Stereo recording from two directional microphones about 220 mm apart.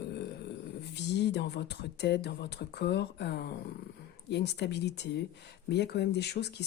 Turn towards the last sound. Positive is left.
turn(degrees=50)  # may be behind; listen again after turning